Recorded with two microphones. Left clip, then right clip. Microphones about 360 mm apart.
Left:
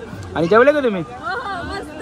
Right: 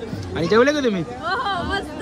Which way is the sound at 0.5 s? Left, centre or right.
Centre.